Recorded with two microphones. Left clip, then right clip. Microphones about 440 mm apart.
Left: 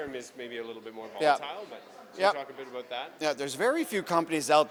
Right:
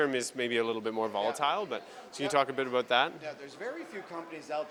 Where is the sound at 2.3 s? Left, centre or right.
Right.